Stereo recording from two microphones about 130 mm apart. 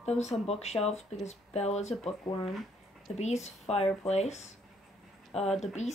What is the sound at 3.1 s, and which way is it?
Speech, 60° left (ahead or behind).